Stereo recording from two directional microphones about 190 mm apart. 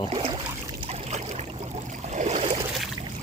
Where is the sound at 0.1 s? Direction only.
30° right (ahead or behind).